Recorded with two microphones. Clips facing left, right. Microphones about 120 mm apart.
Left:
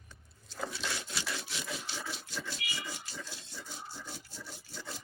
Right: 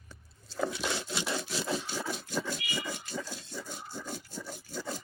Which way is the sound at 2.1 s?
45° right (ahead or behind).